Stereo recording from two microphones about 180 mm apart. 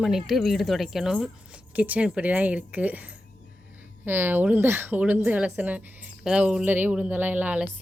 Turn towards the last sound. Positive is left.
turn(degrees=-10)  # may be behind; listen again after turning